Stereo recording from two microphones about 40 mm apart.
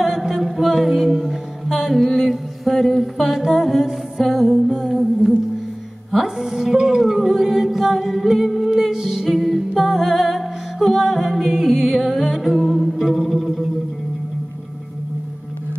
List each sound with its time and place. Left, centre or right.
0.0 s music: centre
4.6 s humming: centre
6.1 s music: centre